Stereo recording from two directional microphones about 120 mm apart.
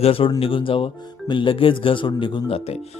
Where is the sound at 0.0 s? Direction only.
50° left (ahead or behind).